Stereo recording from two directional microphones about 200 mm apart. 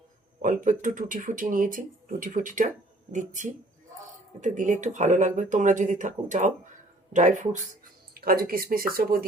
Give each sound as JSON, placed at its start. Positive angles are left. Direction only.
{"t": 0.4, "sound": "speech", "side_deg": -40}
{"t": 8.1, "sound": "speech", "side_deg": -50}